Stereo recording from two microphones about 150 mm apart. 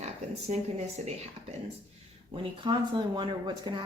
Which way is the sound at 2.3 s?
35° right (ahead or behind).